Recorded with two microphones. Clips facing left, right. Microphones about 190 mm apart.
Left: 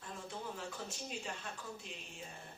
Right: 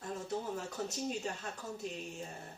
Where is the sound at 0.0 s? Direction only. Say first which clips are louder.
Right 7 dB; 40° right (ahead or behind).